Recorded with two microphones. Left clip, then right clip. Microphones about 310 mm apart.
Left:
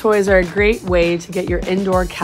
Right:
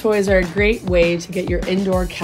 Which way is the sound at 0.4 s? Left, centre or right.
Centre.